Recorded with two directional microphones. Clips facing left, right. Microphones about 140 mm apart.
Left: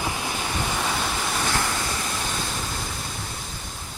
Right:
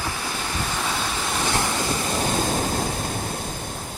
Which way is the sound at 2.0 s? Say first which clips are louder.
Right 7 dB; 40° right (ahead or behind).